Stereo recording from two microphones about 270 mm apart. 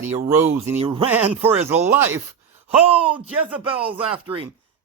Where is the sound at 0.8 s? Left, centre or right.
Centre.